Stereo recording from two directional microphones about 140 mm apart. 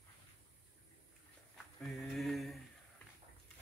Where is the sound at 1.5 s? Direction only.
Centre (ahead or behind).